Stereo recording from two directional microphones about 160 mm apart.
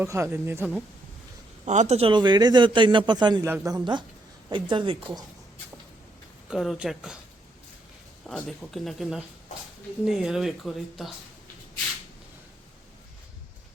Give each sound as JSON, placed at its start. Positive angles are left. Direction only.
{"t": 0.0, "sound": "speech", "side_deg": -15}
{"t": 1.6, "sound": "a man's voice", "side_deg": -50}
{"t": 6.5, "sound": "speech", "side_deg": 0}
{"t": 8.3, "sound": "speech", "side_deg": 0}